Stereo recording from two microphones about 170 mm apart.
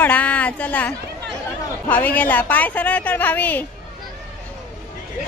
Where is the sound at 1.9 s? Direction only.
10° left (ahead or behind).